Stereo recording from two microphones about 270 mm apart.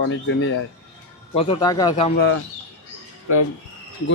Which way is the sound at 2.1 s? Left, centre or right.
Left.